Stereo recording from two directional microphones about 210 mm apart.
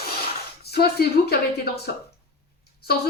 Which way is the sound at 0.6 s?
50° left (ahead or behind).